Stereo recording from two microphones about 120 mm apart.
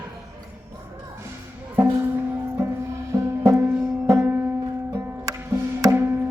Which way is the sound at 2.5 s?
25° right (ahead or behind).